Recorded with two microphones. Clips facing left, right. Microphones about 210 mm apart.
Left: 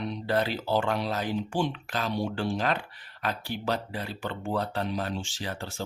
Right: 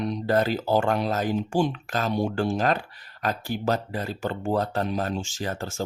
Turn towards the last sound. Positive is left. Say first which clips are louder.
# right 5 dB
turn(degrees=-45)  # may be behind; listen again after turning